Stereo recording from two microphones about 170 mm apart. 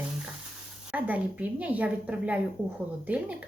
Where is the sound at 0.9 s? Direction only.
10° right (ahead or behind).